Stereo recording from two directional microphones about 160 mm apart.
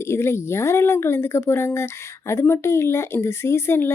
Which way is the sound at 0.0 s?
15° left (ahead or behind).